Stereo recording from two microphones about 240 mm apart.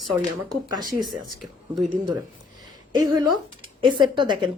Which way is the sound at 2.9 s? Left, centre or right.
Centre.